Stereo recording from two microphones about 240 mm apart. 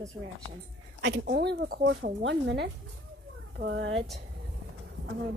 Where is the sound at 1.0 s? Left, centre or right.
Right.